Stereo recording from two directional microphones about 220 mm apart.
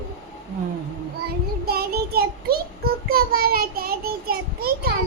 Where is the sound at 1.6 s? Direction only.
45° right (ahead or behind).